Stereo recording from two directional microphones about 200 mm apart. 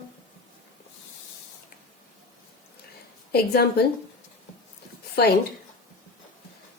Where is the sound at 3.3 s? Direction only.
50° left (ahead or behind).